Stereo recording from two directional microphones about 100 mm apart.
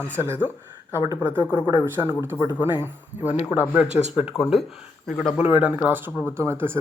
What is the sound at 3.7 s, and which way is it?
Speech, 15° right (ahead or behind).